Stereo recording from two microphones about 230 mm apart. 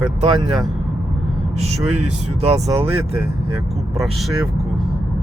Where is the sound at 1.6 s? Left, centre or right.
Right.